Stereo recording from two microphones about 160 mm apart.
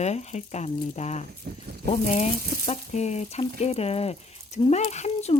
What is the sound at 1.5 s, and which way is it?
Speech, 70° right (ahead or behind).